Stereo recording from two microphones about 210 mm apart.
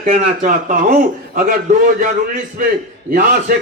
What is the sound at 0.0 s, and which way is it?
A man's voice, 35° right (ahead or behind).